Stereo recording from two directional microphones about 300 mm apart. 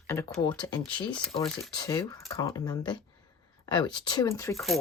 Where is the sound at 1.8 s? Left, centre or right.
Centre.